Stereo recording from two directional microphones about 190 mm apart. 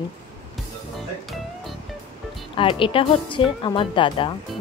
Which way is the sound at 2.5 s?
25° left (ahead or behind).